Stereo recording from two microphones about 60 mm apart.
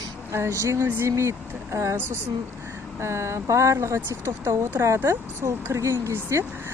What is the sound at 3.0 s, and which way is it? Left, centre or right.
Speech, right.